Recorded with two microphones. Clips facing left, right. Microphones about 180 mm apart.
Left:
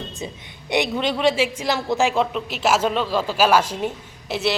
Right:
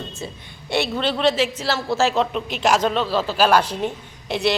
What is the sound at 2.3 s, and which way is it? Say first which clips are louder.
A woman's voice: right 1 dB; 5° left (ahead or behind).